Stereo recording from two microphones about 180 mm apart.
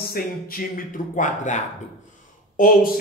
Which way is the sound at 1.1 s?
45° left (ahead or behind).